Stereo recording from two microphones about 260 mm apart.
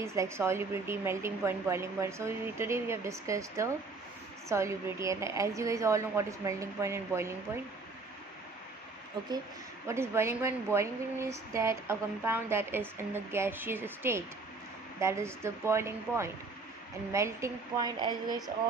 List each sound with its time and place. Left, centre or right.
0.0 s a woman's voice: centre
9.8 s a woman's voice: centre